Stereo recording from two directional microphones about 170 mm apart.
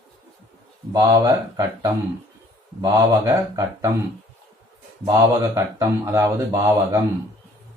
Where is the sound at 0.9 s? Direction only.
20° right (ahead or behind).